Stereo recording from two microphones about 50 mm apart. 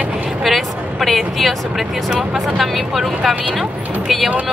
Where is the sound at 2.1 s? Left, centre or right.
Centre.